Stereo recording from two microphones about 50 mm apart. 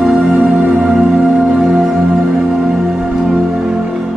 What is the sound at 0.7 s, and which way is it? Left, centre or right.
Music, right.